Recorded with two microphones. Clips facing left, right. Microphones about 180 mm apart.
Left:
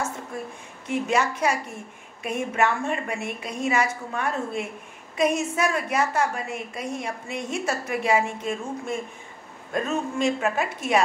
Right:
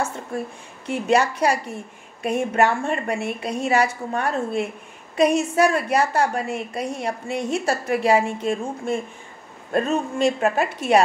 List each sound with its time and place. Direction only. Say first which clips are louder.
0.8 s a woman's voice: right 4 dB; 35° right (ahead or behind)